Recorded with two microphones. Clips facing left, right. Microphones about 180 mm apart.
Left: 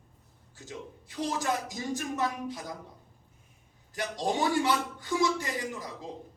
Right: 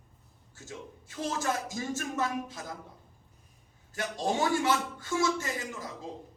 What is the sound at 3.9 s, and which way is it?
A man's voice, 15° left (ahead or behind).